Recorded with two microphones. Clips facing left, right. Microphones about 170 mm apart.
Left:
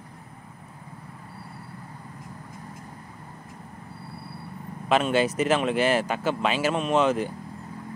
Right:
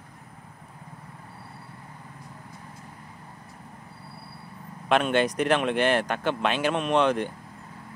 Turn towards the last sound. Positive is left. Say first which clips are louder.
# even
turn(degrees=5)  # may be behind; listen again after turning